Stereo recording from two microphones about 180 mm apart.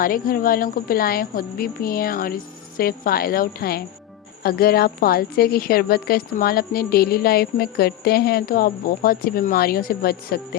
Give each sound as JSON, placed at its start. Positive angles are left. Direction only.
{"t": 0.0, "sound": "a woman's voice", "side_deg": 55}